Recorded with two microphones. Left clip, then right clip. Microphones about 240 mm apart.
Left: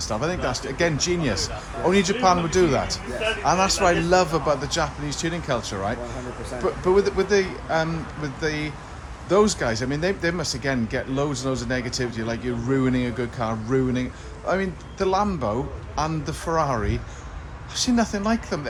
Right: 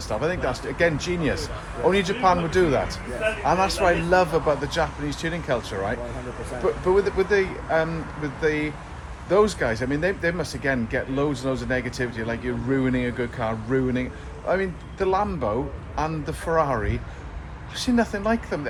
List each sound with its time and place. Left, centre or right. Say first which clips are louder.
0.0 s speech: even; left